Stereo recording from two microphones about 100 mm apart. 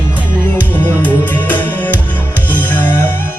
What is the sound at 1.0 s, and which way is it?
Music, 15° left (ahead or behind).